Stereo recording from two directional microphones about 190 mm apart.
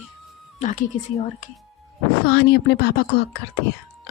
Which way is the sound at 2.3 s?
60° left (ahead or behind).